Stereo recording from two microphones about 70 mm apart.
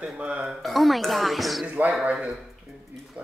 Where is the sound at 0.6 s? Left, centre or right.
Centre.